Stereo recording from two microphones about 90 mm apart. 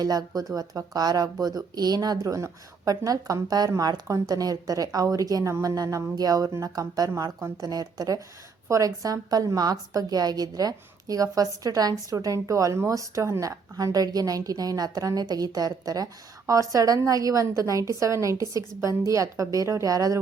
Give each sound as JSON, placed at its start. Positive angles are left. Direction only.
{"t": 0.0, "sound": "a woman's voice", "side_deg": -45}
{"t": 7.3, "sound": "a woman's voice", "side_deg": -30}
{"t": 7.7, "sound": "a woman's voice", "side_deg": -45}